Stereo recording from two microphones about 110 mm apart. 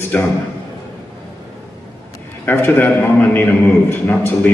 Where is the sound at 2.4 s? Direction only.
20° left (ahead or behind).